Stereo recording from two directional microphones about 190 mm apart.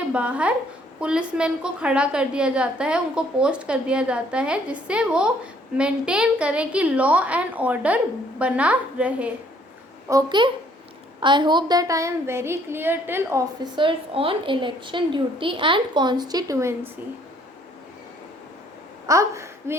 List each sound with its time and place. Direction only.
0.1 s a woman's voice: 5° right (ahead or behind)
10.1 s a woman's voice: 20° right (ahead or behind)
19.0 s speech: 15° right (ahead or behind)